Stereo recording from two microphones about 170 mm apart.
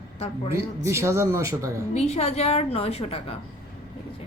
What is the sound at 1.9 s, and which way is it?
A woman's voice, 40° left (ahead or behind).